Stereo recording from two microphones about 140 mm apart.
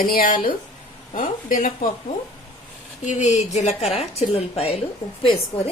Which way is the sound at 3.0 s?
55° left (ahead or behind).